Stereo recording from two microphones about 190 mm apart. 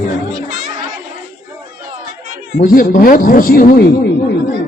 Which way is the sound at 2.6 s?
45° left (ahead or behind).